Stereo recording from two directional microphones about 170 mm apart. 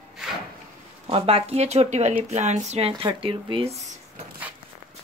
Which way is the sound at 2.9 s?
30° right (ahead or behind).